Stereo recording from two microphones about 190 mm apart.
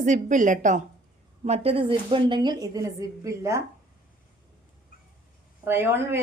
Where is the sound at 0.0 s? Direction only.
40° right (ahead or behind); by 3.6 s 15° right (ahead or behind).